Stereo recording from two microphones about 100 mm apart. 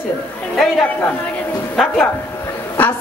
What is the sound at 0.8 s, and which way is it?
Speech, 15° left (ahead or behind).